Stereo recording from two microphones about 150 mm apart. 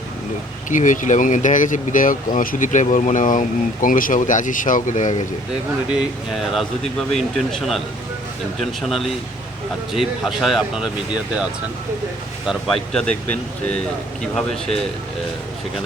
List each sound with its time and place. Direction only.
0.7 s speech: 55° left (ahead or behind)
5.9 s speech: 5° right (ahead or behind)
12.5 s speech: 5° left (ahead or behind)